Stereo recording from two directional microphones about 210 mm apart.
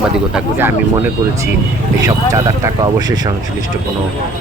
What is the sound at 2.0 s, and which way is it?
Speech, 15° right (ahead or behind).